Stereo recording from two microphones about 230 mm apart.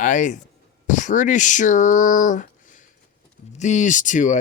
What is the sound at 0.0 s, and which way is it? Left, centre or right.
Speech, left.